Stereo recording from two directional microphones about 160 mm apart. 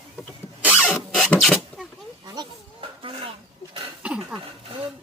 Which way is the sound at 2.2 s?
25° right (ahead or behind).